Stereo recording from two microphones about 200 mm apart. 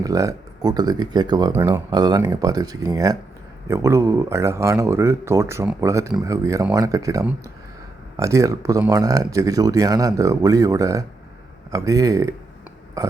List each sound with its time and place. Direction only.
0.0 s speech: 15° right (ahead or behind)